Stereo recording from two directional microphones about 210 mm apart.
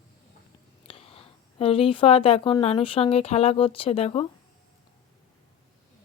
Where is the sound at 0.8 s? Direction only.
25° left (ahead or behind).